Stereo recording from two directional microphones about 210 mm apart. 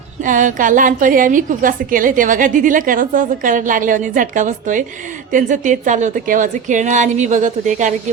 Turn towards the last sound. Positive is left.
turn(degrees=-35)  # may be behind; listen again after turning